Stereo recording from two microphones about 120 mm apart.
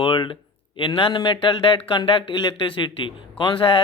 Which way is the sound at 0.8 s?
45° left (ahead or behind).